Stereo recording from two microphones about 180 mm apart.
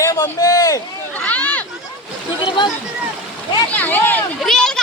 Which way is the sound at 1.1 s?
10° left (ahead or behind).